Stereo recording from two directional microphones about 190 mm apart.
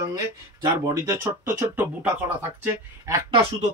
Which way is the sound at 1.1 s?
15° right (ahead or behind).